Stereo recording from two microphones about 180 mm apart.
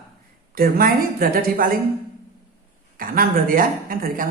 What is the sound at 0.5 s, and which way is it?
A woman's voice, 55° right (ahead or behind).